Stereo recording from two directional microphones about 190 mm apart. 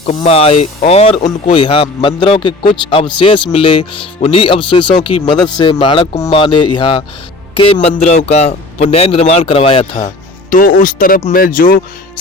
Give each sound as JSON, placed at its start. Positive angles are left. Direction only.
{"t": 0.2, "sound": "a man's voice", "side_deg": 30}
{"t": 10.5, "sound": "speech", "side_deg": 45}